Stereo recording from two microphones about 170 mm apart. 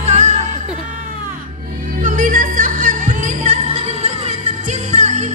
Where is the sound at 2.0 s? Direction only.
50° right (ahead or behind).